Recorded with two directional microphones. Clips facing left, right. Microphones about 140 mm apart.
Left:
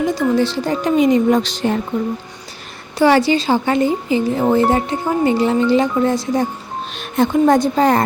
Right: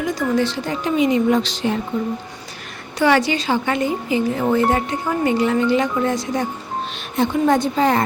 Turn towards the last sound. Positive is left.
turn(degrees=40)  # may be behind; listen again after turning